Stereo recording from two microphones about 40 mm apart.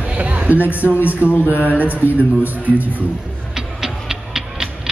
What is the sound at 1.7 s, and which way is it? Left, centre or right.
Speech, right.